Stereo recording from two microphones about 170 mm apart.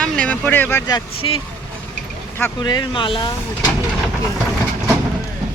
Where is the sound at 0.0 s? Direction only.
5° left (ahead or behind); by 1.4 s 30° left (ahead or behind).